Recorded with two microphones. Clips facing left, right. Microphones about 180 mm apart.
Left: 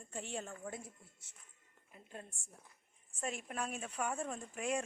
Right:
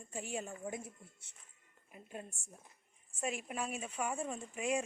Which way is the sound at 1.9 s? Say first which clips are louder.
Right 4 dB; 15° right (ahead or behind).